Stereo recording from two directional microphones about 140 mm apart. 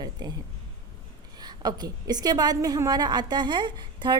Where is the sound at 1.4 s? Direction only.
30° right (ahead or behind).